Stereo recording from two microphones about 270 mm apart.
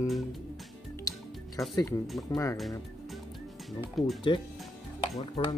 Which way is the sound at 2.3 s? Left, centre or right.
Centre.